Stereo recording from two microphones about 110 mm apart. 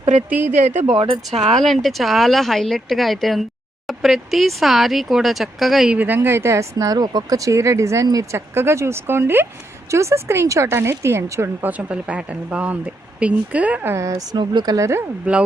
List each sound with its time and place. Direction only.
0.0 s speech: 90° right
0.3 s a woman's voice: 15° right (ahead or behind)
0.6 s speech: 90° right
0.9 s speech: 55° right (ahead or behind)
1.5 s speech: centre (ahead or behind)
6.0 s speech: 20° right (ahead or behind)
11.8 s a woman's voice: 10° right (ahead or behind)
13.9 s speech: 25° right (ahead or behind)
14.3 s speech: 40° right (ahead or behind)